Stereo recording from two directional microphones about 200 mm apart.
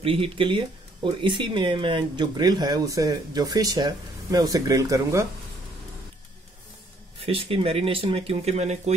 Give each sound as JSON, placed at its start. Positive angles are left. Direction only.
{"t": 0.0, "sound": "speech", "side_deg": -30}
{"t": 7.2, "sound": "speech", "side_deg": -30}